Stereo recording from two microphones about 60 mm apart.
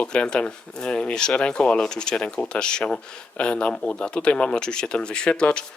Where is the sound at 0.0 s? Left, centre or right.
Centre.